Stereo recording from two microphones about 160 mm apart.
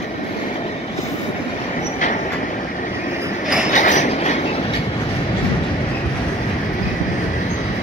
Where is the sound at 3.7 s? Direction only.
50° left (ahead or behind).